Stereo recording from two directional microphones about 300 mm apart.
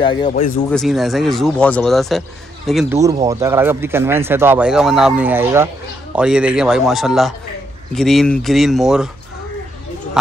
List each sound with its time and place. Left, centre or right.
0.0 s speech: centre
0.7 s speech: centre